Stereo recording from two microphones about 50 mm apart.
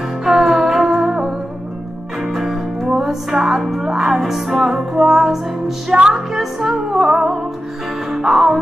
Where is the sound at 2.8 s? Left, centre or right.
Centre.